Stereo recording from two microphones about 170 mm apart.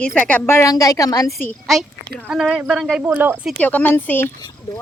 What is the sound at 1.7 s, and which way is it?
Speech, centre (ahead or behind).